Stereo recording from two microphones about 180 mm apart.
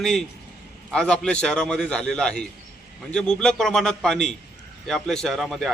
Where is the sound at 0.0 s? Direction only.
Centre (ahead or behind).